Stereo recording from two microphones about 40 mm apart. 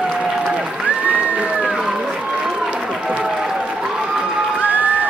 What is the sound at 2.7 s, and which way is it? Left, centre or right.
Applause, right.